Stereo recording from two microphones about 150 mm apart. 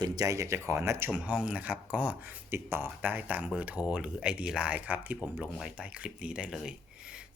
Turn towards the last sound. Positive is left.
turn(degrees=-5)  # may be behind; listen again after turning